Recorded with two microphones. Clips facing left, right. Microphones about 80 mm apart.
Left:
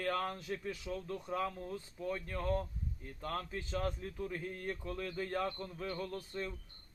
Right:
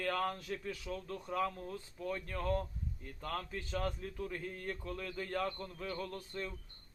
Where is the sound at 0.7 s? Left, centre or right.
Centre.